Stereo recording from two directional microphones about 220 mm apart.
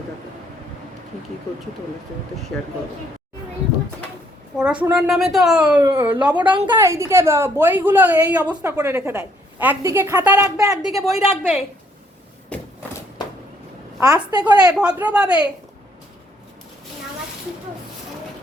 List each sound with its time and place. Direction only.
2.5 s a woman's voice: centre (ahead or behind)
4.5 s a woman's voice: 5° right (ahead or behind)
6.3 s a woman's voice: 20° right (ahead or behind)
10.8 s a woman's voice: centre (ahead or behind)
14.0 s a woman's voice: 15° right (ahead or behind)
14.7 s a woman's voice: 5° right (ahead or behind)